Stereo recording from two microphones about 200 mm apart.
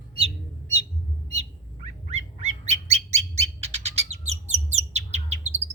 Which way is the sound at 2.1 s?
30° right (ahead or behind).